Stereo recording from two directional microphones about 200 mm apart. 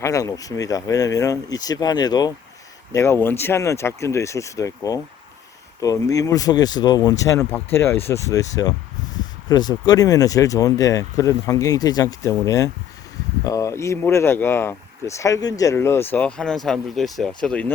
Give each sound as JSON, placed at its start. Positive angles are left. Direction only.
{"t": 0.0, "sound": "speech", "side_deg": 15}